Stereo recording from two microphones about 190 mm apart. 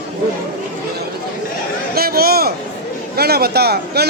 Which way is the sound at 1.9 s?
55° right (ahead or behind).